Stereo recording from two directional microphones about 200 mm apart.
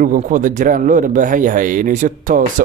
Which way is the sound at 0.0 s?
40° right (ahead or behind).